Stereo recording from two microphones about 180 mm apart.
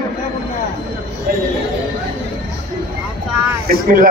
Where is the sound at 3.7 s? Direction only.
50° right (ahead or behind).